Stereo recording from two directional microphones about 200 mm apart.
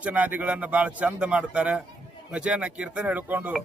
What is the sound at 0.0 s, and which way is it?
A man's voice, 5° right (ahead or behind).